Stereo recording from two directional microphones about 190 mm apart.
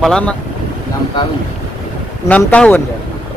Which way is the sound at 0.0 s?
5° left (ahead or behind).